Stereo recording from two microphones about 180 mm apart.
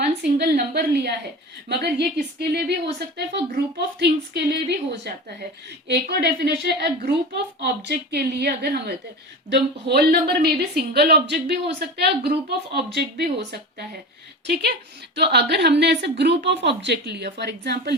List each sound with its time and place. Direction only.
0.2 s a woman's voice: 65° right (ahead or behind)
14.4 s a woman's voice: 65° right (ahead or behind)